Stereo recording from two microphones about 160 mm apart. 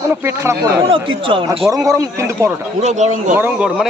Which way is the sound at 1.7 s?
20° right (ahead or behind).